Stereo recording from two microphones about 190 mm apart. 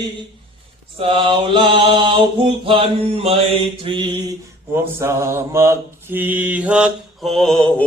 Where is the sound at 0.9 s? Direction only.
30° right (ahead or behind).